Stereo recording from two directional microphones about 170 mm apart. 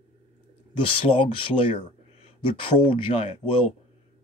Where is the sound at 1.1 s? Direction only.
30° left (ahead or behind).